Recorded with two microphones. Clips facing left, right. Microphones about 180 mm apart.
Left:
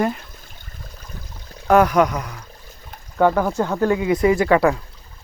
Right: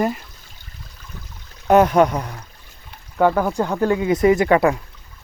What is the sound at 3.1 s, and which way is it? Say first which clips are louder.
Speech: even; 10° right (ahead or behind).